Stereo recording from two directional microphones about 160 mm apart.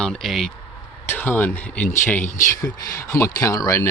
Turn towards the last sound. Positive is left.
turn(degrees=20)  # may be behind; listen again after turning